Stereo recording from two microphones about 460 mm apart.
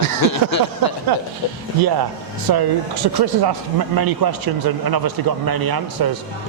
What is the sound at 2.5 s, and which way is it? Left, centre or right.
Speech, right.